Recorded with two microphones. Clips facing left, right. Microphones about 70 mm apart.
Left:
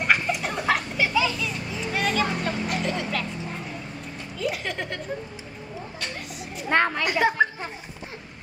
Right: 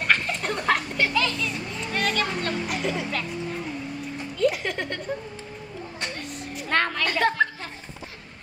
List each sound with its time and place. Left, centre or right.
0.0 s children playing: centre
2.7 s speech: centre
4.4 s speech: centre
6.7 s a woman's voice: centre